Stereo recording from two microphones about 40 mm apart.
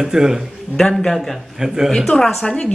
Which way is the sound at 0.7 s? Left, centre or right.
Centre.